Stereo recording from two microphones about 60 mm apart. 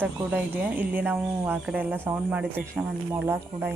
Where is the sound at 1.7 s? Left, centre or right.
Right.